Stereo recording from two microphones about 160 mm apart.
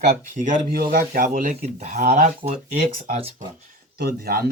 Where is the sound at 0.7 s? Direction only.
70° right (ahead or behind); by 2.3 s 50° right (ahead or behind).